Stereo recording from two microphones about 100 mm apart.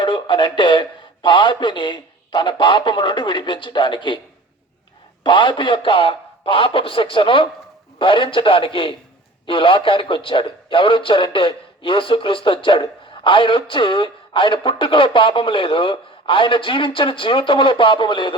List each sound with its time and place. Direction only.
0.0 s speech: 55° left (ahead or behind)
5.2 s a man's voice: 50° left (ahead or behind)